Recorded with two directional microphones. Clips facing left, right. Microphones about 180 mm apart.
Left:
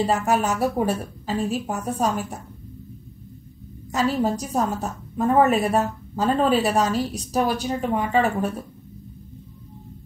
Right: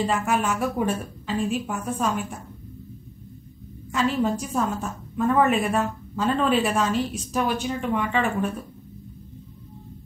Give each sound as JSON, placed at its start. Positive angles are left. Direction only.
{"t": 0.0, "sound": "a woman's voice", "side_deg": 35}
{"t": 3.9, "sound": "a woman's voice", "side_deg": 40}